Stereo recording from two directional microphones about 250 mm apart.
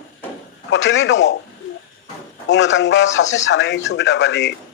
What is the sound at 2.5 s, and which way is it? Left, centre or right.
Speech, left.